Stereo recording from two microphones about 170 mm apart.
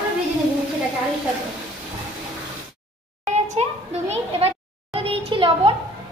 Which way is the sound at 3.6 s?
40° right (ahead or behind).